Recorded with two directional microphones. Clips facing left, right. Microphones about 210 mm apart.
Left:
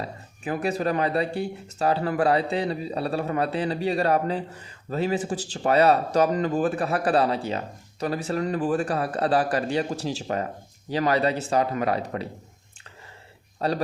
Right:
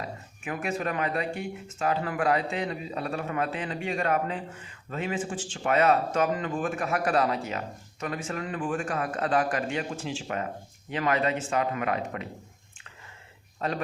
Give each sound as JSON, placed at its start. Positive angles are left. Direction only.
{"t": 0.0, "sound": "speech", "side_deg": 35}
{"t": 13.6, "sound": "speech", "side_deg": 35}